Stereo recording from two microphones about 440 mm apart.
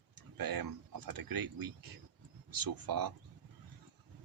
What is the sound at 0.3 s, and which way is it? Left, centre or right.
Speech, right.